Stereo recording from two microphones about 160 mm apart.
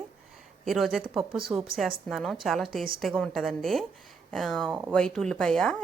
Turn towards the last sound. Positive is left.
turn(degrees=5)  # may be behind; listen again after turning